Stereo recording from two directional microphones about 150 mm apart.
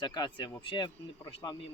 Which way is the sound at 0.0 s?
30° left (ahead or behind).